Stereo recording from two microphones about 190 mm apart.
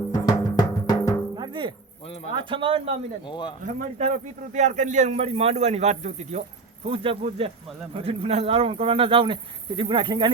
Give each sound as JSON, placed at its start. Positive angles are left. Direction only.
{"t": 0.1, "sound": "music", "side_deg": 20}
{"t": 1.4, "sound": "music", "side_deg": -25}
{"t": 2.4, "sound": "speech", "side_deg": -25}
{"t": 3.2, "sound": "speech", "side_deg": 25}
{"t": 3.6, "sound": "speech", "side_deg": -45}
{"t": 6.8, "sound": "speech", "side_deg": -30}